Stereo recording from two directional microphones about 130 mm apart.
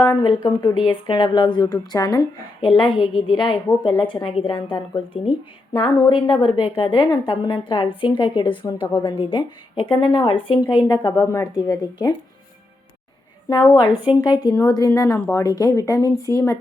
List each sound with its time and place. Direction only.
0.4 s a woman's voice: 35° left (ahead or behind)
11.3 s a woman's voice: 25° left (ahead or behind)
13.5 s a woman's voice: 35° left (ahead or behind)